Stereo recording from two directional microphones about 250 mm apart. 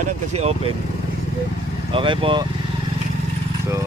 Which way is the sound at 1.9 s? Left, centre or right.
Centre.